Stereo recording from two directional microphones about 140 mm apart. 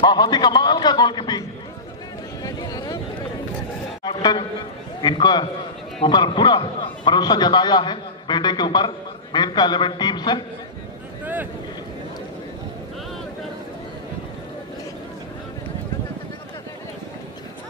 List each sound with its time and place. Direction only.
0.0 s a man's voice: 30° left (ahead or behind)
2.4 s a sound: 25° left (ahead or behind)
4.0 s a man's voice: 30° left (ahead or behind)